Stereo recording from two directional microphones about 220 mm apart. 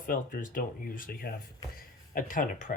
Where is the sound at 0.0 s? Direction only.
40° left (ahead or behind).